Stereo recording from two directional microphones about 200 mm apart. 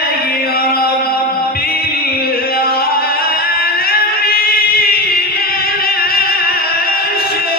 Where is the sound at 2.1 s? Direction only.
50° left (ahead or behind).